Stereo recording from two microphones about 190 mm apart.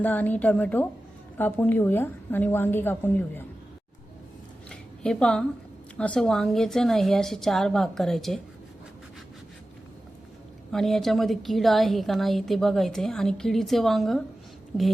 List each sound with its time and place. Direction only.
0.0 s a woman's voice: 10° left (ahead or behind)
4.7 s a sound: 5° left (ahead or behind)
6.0 s a woman's voice: 5° left (ahead or behind)
10.7 s a woman's voice: centre (ahead or behind)